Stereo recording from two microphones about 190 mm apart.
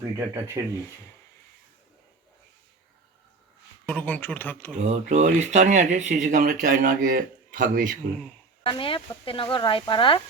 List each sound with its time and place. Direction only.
0.6 s speech: 15° right (ahead or behind)
3.8 s speech: 5° left (ahead or behind)
4.8 s speech: 40° right (ahead or behind)
8.6 s speech: 30° left (ahead or behind)